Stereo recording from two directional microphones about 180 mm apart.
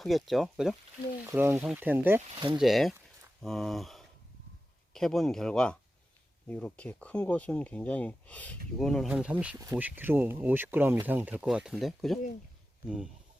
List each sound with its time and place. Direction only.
0.0 s speech: centre (ahead or behind)
2.3 s speech: 30° right (ahead or behind)
2.6 s speech: centre (ahead or behind)